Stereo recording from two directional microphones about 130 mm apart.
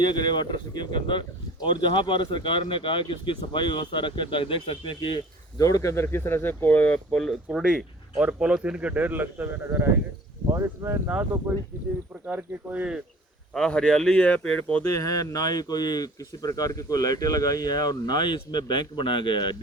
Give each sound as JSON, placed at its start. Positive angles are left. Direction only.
{"t": 0.0, "sound": "speech", "side_deg": 35}
{"t": 13.5, "sound": "speech", "side_deg": 5}
{"t": 14.9, "sound": "speech", "side_deg": 25}